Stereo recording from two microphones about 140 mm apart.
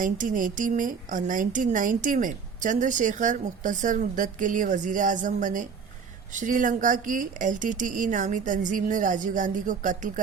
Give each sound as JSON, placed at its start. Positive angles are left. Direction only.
{"t": 0.0, "sound": "a woman's voice", "side_deg": -70}